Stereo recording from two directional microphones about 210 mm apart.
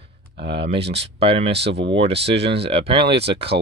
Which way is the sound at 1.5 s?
55° right (ahead or behind).